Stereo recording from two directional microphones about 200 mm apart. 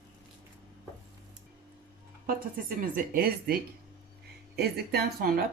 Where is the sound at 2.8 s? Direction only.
45° right (ahead or behind).